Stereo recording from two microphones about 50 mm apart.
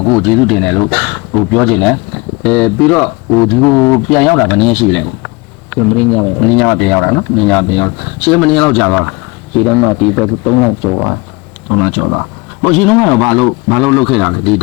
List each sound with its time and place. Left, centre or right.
0.0 s speech: centre
11.8 s speech: centre